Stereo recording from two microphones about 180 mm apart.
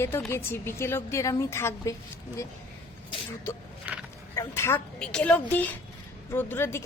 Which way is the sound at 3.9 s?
5° right (ahead or behind).